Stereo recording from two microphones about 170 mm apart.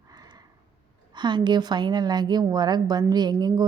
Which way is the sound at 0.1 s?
25° right (ahead or behind).